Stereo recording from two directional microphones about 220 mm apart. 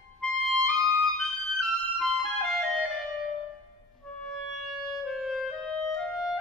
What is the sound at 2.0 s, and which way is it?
Music, centre (ahead or behind).